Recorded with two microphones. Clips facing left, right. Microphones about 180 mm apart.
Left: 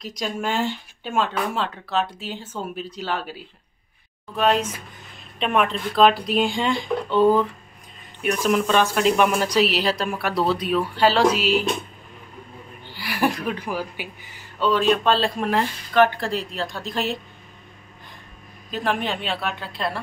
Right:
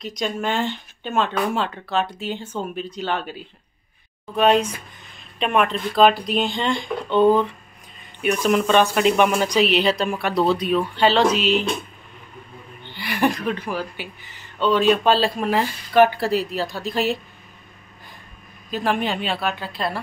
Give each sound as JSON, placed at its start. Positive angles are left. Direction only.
{"t": 0.0, "sound": "a woman's voice", "side_deg": 5}
{"t": 4.4, "sound": "a woman's voice", "side_deg": 0}
{"t": 12.8, "sound": "a woman's voice", "side_deg": 5}
{"t": 18.7, "sound": "a woman's voice", "side_deg": 0}